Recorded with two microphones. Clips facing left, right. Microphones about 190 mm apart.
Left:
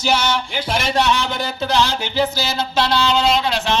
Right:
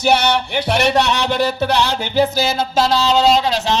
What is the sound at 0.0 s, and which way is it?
Speech, 60° right (ahead or behind).